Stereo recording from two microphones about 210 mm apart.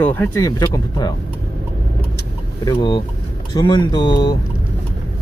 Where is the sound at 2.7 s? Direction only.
20° left (ahead or behind).